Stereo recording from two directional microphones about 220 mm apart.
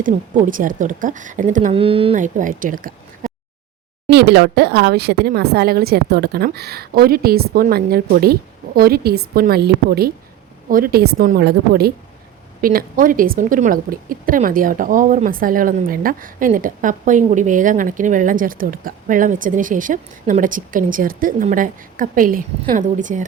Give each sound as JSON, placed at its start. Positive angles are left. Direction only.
{"t": 0.0, "sound": "a woman's voice", "side_deg": -35}
{"t": 4.1, "sound": "a woman's voice", "side_deg": -50}